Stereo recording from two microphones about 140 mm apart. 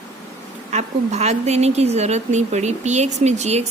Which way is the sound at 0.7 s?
55° right (ahead or behind).